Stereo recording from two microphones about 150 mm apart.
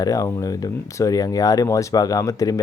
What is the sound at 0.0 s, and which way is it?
Speech, 25° left (ahead or behind).